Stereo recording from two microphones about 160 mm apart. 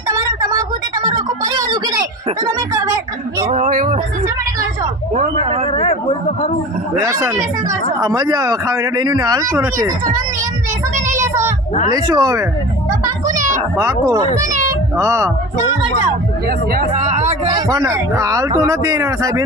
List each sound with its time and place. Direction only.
0.1 s a sound: 20° right (ahead or behind)
3.5 s speech: 55° right (ahead or behind)
5.1 s a man's voice: 45° right (ahead or behind)
7.0 s speech: 20° right (ahead or behind)
11.2 s child singing: 15° right (ahead or behind)
11.9 s speech: 25° right (ahead or behind)
13.3 s music: 50° right (ahead or behind)
13.7 s speech: 20° right (ahead or behind)
14.7 s a sound: 20° right (ahead or behind)
16.9 s music: 45° right (ahead or behind)
17.4 s speech: 25° right (ahead or behind)